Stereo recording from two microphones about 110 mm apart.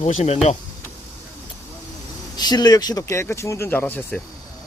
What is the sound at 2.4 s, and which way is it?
Speech, 40° left (ahead or behind).